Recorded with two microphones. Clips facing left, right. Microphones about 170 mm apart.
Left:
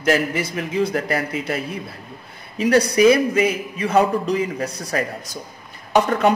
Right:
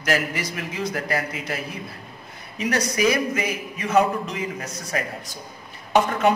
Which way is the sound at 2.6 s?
30° left (ahead or behind).